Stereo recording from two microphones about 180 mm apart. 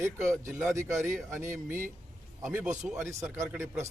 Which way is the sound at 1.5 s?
45° right (ahead or behind).